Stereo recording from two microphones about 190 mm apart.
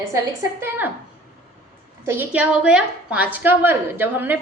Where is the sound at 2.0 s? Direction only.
10° right (ahead or behind).